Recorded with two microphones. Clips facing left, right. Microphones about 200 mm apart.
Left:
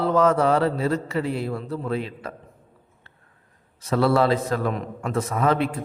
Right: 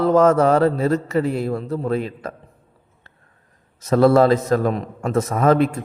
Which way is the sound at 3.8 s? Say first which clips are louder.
Right 6 dB; 45° right (ahead or behind).